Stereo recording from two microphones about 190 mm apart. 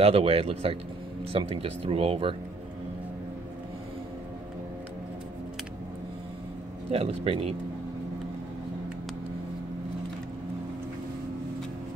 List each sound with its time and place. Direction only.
0.0 s speech: 30° right (ahead or behind)
6.9 s speech: 30° right (ahead or behind)